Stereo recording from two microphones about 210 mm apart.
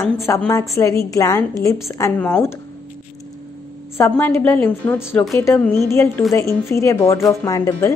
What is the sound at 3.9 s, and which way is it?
A woman's voice, 10° left (ahead or behind).